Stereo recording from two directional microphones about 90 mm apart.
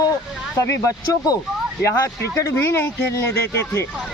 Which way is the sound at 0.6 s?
35° left (ahead or behind).